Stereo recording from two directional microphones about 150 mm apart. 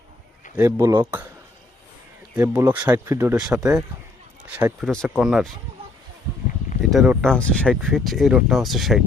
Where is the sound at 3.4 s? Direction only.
5° right (ahead or behind).